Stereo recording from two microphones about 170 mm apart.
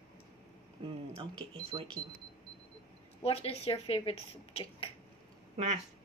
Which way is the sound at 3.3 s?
35° left (ahead or behind).